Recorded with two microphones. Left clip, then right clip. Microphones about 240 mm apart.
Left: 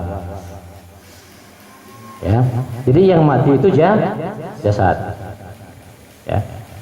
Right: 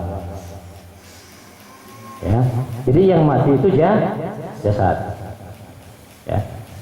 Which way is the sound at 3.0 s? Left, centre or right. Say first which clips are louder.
Left 2 dB; centre.